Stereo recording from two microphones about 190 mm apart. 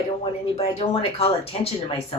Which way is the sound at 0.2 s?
30° left (ahead or behind).